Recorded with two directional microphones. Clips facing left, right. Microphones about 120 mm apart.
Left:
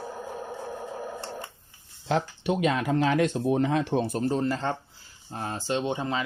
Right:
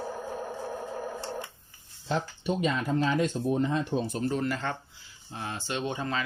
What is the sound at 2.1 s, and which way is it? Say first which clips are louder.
Speech: left 4 dB; 85° left.